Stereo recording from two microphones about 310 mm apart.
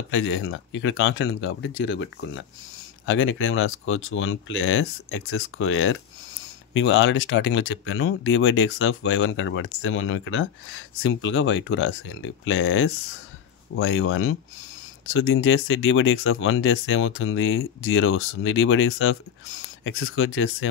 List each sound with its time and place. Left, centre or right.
0.1 s speech: left